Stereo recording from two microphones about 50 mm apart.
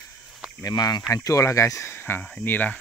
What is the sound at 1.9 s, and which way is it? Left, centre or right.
Speech, left.